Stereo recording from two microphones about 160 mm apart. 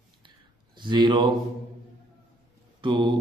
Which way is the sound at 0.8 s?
30° right (ahead or behind).